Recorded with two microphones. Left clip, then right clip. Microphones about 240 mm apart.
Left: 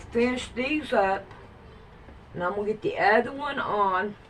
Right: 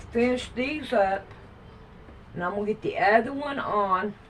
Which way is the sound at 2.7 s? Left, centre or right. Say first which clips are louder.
Right 1 dB; centre.